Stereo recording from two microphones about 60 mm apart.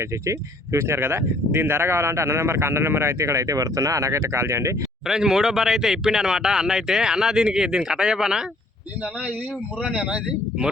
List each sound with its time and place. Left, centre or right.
0.0 s speech: right
5.0 s speech: centre
9.8 s speech: centre